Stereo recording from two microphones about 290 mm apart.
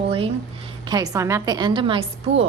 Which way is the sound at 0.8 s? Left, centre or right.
Centre.